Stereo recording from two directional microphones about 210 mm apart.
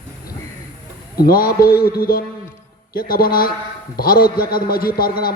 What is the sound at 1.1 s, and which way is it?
A man's voice, 45° left (ahead or behind).